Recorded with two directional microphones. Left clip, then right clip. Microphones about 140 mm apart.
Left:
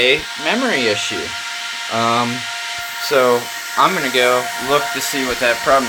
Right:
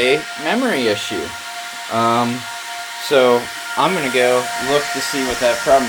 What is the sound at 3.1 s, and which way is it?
Speech, 35° right (ahead or behind).